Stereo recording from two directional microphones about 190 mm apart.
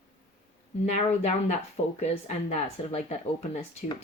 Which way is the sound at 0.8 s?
35° left (ahead or behind).